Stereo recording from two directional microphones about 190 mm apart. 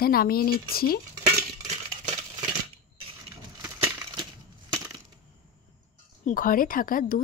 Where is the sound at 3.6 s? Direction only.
20° right (ahead or behind).